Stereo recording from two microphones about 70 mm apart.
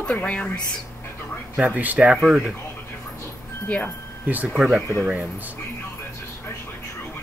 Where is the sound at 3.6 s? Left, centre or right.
Left.